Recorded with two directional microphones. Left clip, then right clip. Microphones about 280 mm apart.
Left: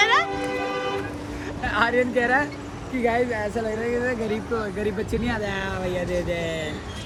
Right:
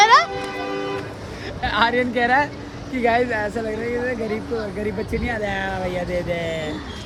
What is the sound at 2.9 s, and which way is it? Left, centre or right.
Speech, centre.